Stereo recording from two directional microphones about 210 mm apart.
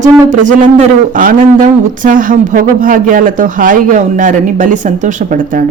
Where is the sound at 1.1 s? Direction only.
40° right (ahead or behind).